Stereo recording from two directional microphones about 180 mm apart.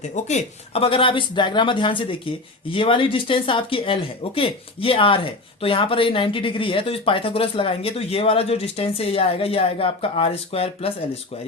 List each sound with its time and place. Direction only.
0.3 s speech: 35° left (ahead or behind)